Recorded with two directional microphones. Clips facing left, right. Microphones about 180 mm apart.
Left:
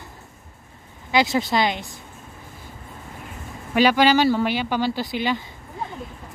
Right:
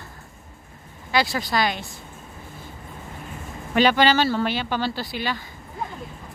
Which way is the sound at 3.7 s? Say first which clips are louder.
Left 1 dB; 10° left (ahead or behind).